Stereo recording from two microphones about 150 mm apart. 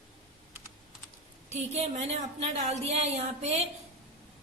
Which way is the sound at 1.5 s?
50° right (ahead or behind).